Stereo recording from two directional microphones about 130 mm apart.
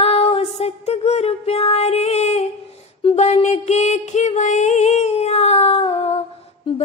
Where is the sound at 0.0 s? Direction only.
50° left (ahead or behind).